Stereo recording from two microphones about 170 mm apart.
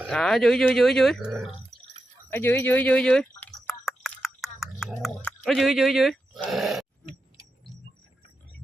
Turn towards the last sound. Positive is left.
turn(degrees=0)  # may be behind; listen again after turning